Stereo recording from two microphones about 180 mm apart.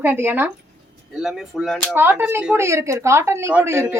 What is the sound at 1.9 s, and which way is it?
Speech, 10° right (ahead or behind).